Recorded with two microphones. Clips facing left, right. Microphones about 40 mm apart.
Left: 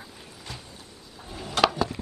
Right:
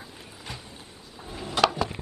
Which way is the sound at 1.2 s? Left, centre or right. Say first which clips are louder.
Right 1 dB; centre.